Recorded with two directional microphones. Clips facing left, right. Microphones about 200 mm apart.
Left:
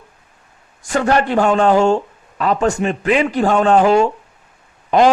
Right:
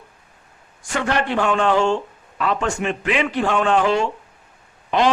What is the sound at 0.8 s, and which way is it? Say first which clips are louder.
A man's voice: left 6 dB; 40° left (ahead or behind).